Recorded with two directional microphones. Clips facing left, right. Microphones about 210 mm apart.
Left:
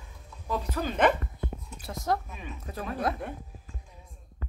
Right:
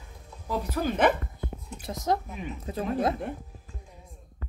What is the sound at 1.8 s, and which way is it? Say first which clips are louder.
Speech: right 2 dB; 20° right (ahead or behind).